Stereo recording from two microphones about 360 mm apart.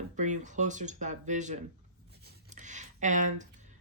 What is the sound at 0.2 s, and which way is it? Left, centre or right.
Speech, centre.